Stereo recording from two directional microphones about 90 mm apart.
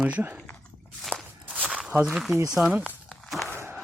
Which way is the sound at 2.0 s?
Centre (ahead or behind).